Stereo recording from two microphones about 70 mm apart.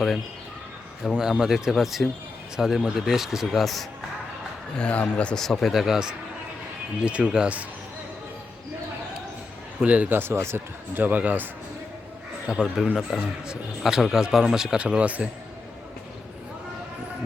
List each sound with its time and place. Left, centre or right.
1.1 s a man's voice: centre
4.8 s speech: centre
5.4 s a man's voice: centre
9.8 s speech: right
12.5 s a man's voice: centre